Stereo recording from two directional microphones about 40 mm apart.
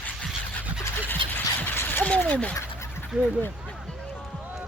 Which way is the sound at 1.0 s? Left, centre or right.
Left.